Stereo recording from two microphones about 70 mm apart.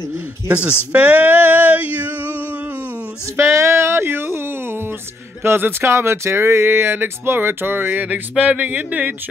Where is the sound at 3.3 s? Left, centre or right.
Right.